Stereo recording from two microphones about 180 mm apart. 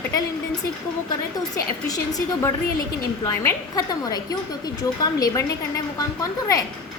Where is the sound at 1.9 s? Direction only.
20° left (ahead or behind).